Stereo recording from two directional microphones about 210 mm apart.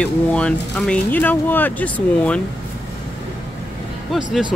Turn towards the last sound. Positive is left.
turn(degrees=-5)  # may be behind; listen again after turning